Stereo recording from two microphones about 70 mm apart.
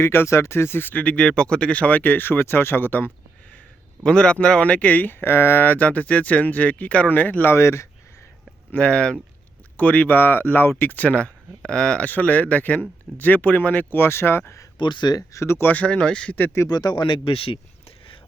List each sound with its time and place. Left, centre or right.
0.0 s speech: left
4.0 s speech: centre
5.2 s speech: left
7.5 s speech: left
8.7 s speech: centre; by 14.6 s left
14.8 s speech: left
15.3 s speech: left
15.7 s speech: centre
16.6 s speech: left